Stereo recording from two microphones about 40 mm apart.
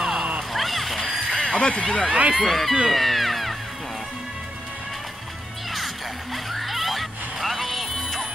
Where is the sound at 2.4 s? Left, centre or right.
Centre.